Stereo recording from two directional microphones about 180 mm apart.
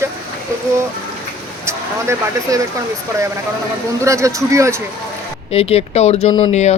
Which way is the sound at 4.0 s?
15° right (ahead or behind).